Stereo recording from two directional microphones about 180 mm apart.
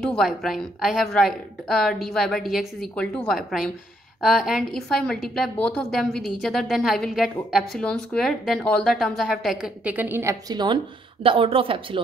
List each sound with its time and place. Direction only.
0.0 s a woman's voice: centre (ahead or behind)
10.5 s a woman's voice: 25° right (ahead or behind)